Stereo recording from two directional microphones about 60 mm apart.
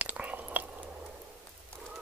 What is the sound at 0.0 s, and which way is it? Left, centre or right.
Chewing, right.